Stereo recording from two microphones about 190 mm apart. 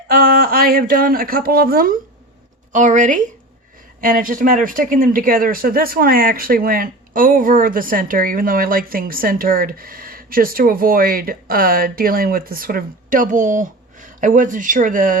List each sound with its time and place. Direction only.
0.1 s speech: 50° right (ahead or behind)